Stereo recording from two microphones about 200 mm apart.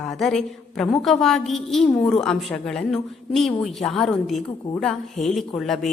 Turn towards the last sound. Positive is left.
turn(degrees=0)  # may be behind; listen again after turning